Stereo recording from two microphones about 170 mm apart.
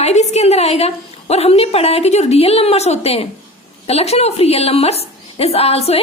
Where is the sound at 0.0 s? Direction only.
40° left (ahead or behind).